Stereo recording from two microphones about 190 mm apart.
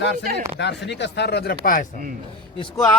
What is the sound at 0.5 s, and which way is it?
Speech, 65° left (ahead or behind).